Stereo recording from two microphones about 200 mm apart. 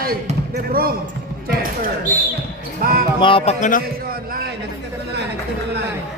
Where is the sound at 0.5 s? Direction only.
50° right (ahead or behind).